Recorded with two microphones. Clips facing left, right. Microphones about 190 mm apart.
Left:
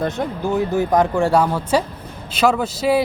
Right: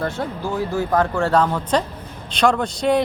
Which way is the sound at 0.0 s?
20° left (ahead or behind).